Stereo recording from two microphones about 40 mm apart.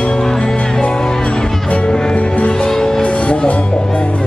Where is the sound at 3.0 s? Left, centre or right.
Left.